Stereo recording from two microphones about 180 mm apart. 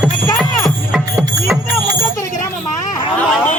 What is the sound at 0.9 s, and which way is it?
Music, 5° right (ahead or behind).